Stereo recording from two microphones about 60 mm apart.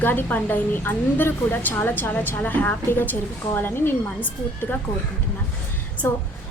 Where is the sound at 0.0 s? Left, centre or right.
Left.